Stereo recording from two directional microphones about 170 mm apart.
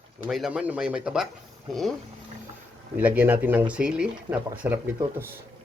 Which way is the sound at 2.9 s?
10° right (ahead or behind).